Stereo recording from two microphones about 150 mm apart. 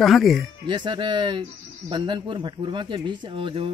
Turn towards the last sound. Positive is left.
turn(degrees=-35)  # may be behind; listen again after turning